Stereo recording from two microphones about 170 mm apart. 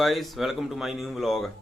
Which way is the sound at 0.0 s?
Centre (ahead or behind).